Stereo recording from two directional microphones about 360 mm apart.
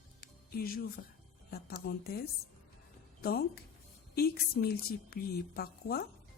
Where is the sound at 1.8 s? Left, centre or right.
Left.